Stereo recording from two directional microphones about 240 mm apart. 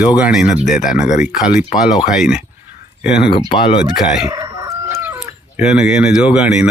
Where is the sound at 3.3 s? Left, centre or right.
Left.